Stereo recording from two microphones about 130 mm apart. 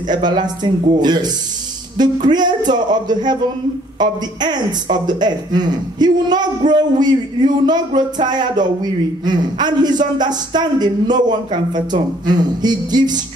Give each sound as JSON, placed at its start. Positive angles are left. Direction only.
{"t": 0.1, "sound": "speech", "side_deg": -35}